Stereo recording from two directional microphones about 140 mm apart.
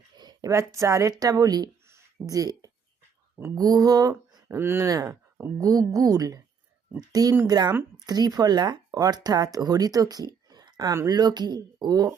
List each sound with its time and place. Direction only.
0.2 s speech: 25° right (ahead or behind)
4.4 s speech: 15° right (ahead or behind)